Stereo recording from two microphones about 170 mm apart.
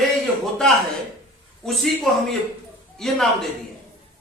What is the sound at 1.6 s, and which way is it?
A man's voice, centre (ahead or behind).